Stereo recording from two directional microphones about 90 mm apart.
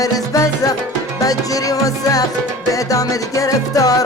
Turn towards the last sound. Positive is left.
turn(degrees=40)  # may be behind; listen again after turning